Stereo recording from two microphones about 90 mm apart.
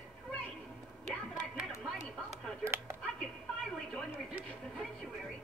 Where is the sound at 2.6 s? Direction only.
30° right (ahead or behind).